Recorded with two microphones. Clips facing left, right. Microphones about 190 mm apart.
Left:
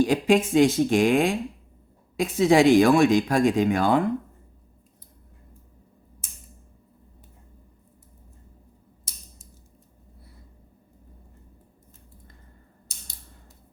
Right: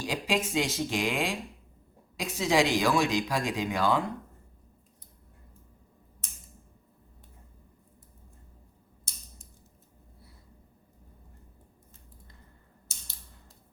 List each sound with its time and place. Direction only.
0.0 s speech: 50° left (ahead or behind)